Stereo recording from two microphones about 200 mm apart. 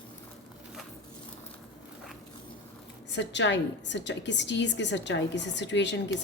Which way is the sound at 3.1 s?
65° left (ahead or behind).